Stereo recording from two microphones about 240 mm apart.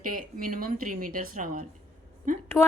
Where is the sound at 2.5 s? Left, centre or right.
Centre.